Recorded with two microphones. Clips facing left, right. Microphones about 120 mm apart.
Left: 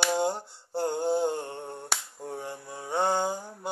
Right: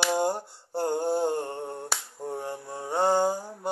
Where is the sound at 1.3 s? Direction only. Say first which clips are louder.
Right 4 dB; 45° right (ahead or behind).